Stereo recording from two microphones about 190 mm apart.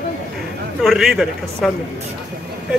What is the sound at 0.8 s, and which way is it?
Speech, centre (ahead or behind).